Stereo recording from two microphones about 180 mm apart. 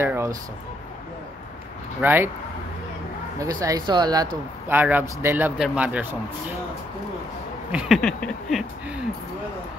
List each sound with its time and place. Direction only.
0.0 s speech: 15° right (ahead or behind)
2.0 s speech: 10° right (ahead or behind)
3.6 s speech: 20° right (ahead or behind)
4.6 s speech: 10° right (ahead or behind)
7.7 s a sound: centre (ahead or behind)